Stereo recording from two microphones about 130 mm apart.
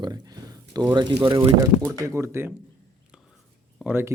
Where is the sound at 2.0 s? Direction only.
20° right (ahead or behind).